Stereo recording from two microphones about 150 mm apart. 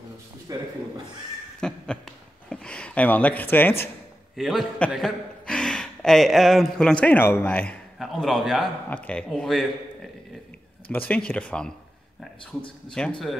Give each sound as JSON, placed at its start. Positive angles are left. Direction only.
{"t": 0.5, "sound": "speech", "side_deg": -25}
{"t": 1.6, "sound": "a sound", "side_deg": 5}
{"t": 4.4, "sound": "a man's voice", "side_deg": 0}
{"t": 10.9, "sound": "speech", "side_deg": 10}